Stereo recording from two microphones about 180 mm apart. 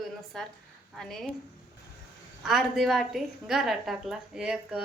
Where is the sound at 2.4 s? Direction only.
Centre (ahead or behind).